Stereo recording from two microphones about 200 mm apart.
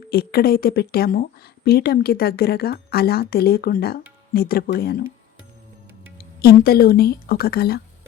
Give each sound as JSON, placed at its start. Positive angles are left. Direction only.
{"t": 0.1, "sound": "speech", "side_deg": 50}
{"t": 6.1, "sound": "speech", "side_deg": 50}